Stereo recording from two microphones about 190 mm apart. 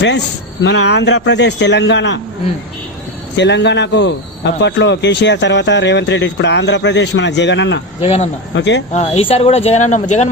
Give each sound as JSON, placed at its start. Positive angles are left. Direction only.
{"t": 0.6, "sound": "speech", "side_deg": 70}
{"t": 3.3, "sound": "a man's voice", "side_deg": 65}
{"t": 8.0, "sound": "speech", "side_deg": 30}
{"t": 8.5, "sound": "speech", "side_deg": 70}
{"t": 8.9, "sound": "speech", "side_deg": 35}